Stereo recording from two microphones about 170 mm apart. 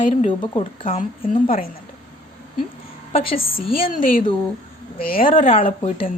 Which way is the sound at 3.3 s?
60° left (ahead or behind).